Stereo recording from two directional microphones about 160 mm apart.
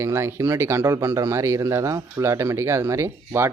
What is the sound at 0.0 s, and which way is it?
A man's voice, 15° right (ahead or behind).